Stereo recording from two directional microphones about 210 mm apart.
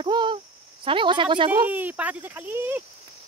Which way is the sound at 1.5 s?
10° right (ahead or behind).